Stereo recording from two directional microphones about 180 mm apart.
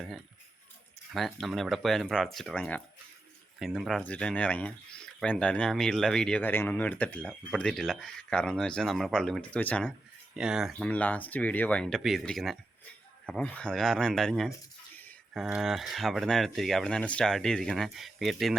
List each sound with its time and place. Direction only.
1.1 s speech: centre (ahead or behind)
10.3 s speech: 5° right (ahead or behind)